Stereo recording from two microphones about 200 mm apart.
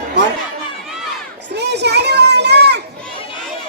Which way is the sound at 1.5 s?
55° right (ahead or behind).